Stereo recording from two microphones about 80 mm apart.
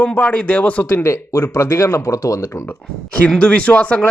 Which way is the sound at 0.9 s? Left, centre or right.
Left.